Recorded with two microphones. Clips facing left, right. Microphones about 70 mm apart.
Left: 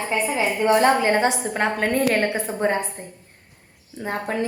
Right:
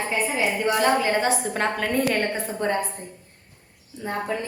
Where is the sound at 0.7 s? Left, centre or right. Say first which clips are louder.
Left 5 dB; left.